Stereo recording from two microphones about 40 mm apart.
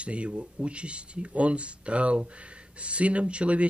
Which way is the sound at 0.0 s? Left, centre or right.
Right.